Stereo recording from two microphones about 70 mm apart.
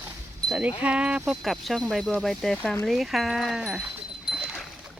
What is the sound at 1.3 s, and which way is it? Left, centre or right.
Speech, centre.